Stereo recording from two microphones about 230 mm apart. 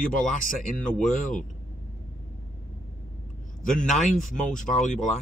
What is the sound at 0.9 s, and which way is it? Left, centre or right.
Speech, centre.